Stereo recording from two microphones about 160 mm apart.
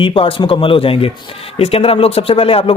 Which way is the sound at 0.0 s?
35° left (ahead or behind).